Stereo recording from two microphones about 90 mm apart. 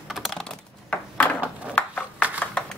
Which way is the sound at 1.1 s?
15° left (ahead or behind).